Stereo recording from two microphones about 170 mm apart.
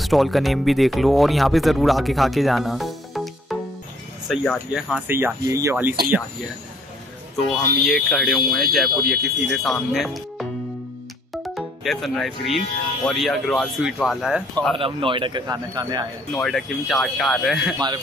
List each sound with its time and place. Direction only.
0.0 s speech: centre (ahead or behind)
7.8 s speech: centre (ahead or behind)
11.4 s speech: centre (ahead or behind)
14.8 s a man's voice: 30° right (ahead or behind)
16.3 s speech: centre (ahead or behind)
17.7 s a man's voice: 25° right (ahead or behind)